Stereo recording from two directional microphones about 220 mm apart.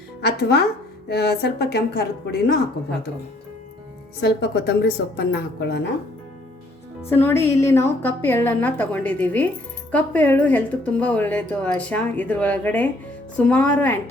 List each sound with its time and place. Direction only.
0.2 s a woman's voice: 50° left (ahead or behind)
4.2 s a woman's voice: 50° left (ahead or behind)
7.1 s speech: 10° left (ahead or behind)